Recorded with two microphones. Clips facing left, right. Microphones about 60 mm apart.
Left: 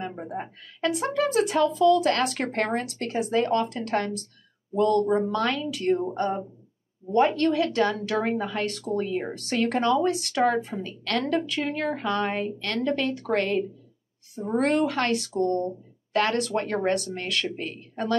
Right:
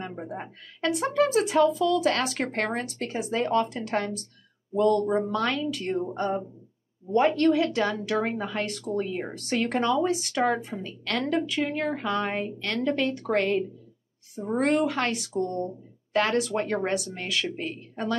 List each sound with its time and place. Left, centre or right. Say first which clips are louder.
0.0 s a woman's voice: left 2 dB; centre